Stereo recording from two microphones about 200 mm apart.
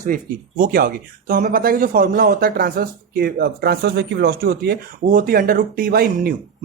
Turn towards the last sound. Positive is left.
turn(degrees=-50)  # may be behind; listen again after turning